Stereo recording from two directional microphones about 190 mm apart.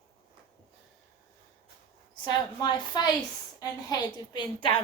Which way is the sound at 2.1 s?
25° left (ahead or behind).